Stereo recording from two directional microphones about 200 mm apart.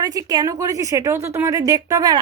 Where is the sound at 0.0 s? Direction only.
20° right (ahead or behind).